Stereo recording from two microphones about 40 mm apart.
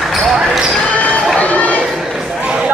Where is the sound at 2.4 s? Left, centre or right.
Right.